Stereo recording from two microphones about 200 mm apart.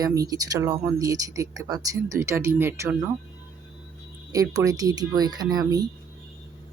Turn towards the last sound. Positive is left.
turn(degrees=-20)  # may be behind; listen again after turning